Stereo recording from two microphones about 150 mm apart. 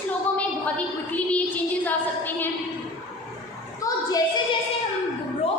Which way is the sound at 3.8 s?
25° left (ahead or behind).